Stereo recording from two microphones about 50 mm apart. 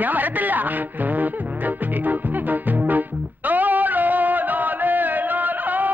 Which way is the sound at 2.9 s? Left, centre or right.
Right.